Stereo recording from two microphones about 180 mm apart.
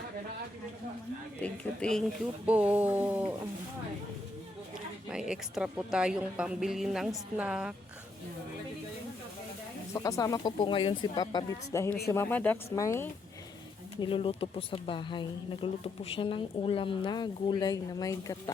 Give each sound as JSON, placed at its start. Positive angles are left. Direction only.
{"t": 1.4, "sound": "a woman's voice", "side_deg": 5}
{"t": 2.5, "sound": "a sound", "side_deg": -5}
{"t": 5.0, "sound": "a woman's voice", "side_deg": -5}
{"t": 9.9, "sound": "speech", "side_deg": 20}
{"t": 14.0, "sound": "speech", "side_deg": 30}